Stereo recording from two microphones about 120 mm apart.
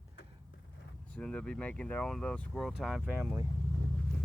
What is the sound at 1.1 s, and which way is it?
Speech, 10° left (ahead or behind).